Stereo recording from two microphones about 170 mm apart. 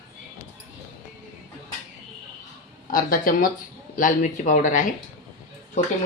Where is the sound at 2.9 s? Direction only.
55° left (ahead or behind).